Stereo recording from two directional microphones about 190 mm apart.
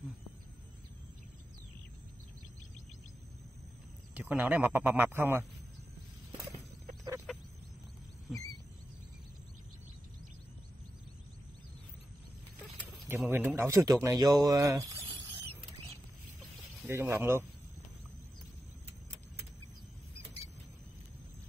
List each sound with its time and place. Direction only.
4.1 s speech: 10° right (ahead or behind)
7.3 s a sound: centre (ahead or behind)
13.2 s speech: 10° right (ahead or behind)
16.9 s speech: 15° right (ahead or behind)